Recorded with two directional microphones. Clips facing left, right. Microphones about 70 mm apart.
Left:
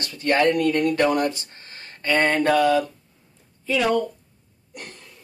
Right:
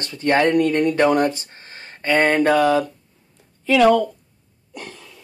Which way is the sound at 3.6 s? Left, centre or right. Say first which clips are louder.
Right 7 dB; right.